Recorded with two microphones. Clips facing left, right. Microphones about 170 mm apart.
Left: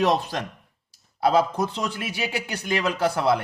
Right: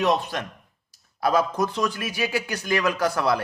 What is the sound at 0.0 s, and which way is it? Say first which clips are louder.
A man's voice: left 1 dB; 30° left (ahead or behind).